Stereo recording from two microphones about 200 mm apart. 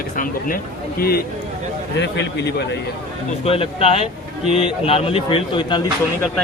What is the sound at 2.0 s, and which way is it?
Speech, 60° left (ahead or behind).